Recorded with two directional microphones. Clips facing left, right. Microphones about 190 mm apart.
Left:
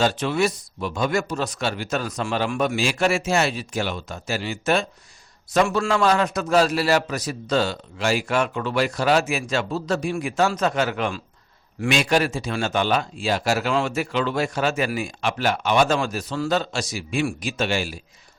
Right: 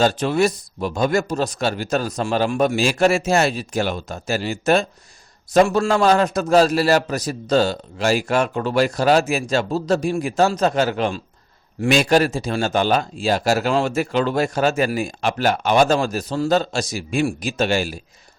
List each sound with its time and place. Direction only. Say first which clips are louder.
0.0 s a man's voice: right 4 dB; 40° right (ahead or behind)